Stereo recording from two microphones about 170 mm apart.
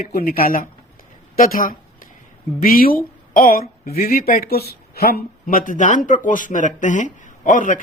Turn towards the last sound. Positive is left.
turn(degrees=50)  # may be behind; listen again after turning